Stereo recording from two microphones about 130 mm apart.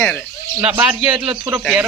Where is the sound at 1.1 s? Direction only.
40° right (ahead or behind).